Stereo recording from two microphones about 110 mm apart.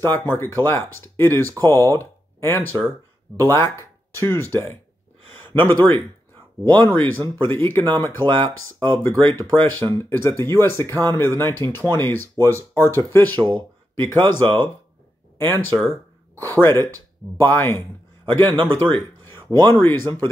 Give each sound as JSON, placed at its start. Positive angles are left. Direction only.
{"t": 0.1, "sound": "speech", "side_deg": 20}